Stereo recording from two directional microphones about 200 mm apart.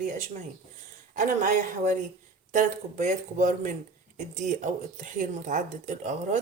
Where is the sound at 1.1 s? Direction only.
40° right (ahead or behind).